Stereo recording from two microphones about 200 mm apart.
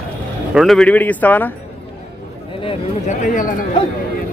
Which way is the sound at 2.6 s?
30° left (ahead or behind).